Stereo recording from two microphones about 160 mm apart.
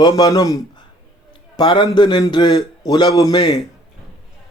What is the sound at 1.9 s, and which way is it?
Speech, 30° left (ahead or behind).